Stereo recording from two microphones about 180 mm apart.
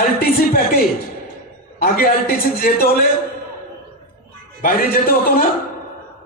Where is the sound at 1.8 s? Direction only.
55° left (ahead or behind).